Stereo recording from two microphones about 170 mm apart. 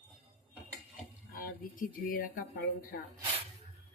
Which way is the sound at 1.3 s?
55° left (ahead or behind).